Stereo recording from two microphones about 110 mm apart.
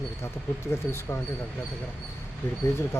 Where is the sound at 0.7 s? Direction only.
25° left (ahead or behind).